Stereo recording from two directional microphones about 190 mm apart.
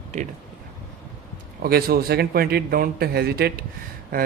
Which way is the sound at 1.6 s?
55° right (ahead or behind).